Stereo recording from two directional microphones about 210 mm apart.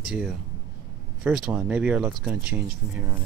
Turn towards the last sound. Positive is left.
turn(degrees=-5)  # may be behind; listen again after turning